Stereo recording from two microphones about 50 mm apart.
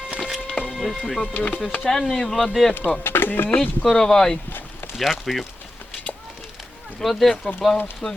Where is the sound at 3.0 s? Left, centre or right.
Left.